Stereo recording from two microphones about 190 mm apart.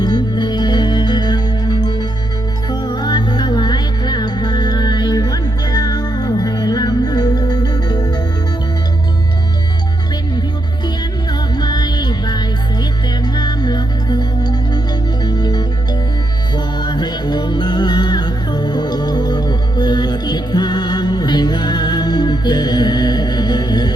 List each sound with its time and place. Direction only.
0.0 s music: 20° left (ahead or behind)
10.8 s music: 20° left (ahead or behind)